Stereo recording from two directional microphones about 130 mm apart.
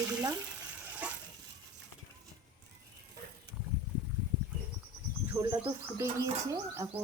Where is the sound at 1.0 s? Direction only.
10° right (ahead or behind).